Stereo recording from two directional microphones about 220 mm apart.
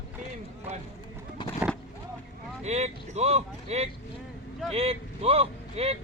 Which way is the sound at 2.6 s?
30° right (ahead or behind).